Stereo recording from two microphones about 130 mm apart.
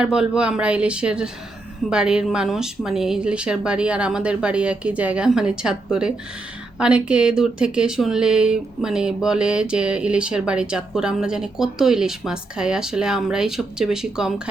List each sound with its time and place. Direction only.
0.0 s speech: 5° right (ahead or behind)